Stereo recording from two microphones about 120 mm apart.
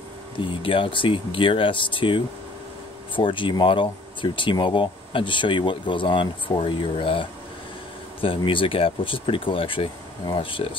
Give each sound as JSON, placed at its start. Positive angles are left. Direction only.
{"t": 0.4, "sound": "speech", "side_deg": 45}